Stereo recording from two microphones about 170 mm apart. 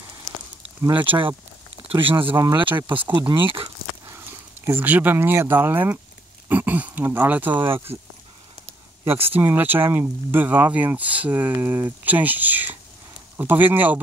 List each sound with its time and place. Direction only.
1.9 s speech: 30° right (ahead or behind)
4.1 s speech: 15° right (ahead or behind)
9.0 s speech: 10° right (ahead or behind)